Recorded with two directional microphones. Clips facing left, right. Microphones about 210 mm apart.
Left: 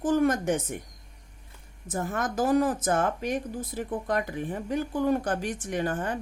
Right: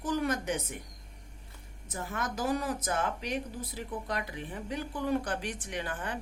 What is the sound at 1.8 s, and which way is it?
A woman's voice, 50° left (ahead or behind).